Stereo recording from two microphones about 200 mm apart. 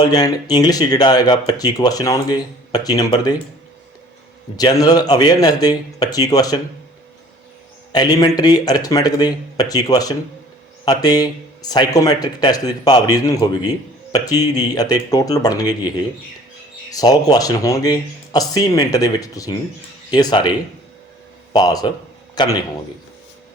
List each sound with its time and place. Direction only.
0.0 s speech: 20° left (ahead or behind)
4.5 s speech: 20° left (ahead or behind)
7.9 s speech: 20° left (ahead or behind)
21.5 s speech: 20° left (ahead or behind)